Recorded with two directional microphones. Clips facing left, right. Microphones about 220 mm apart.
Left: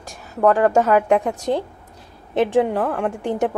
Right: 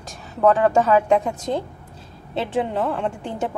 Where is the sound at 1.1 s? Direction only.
15° left (ahead or behind).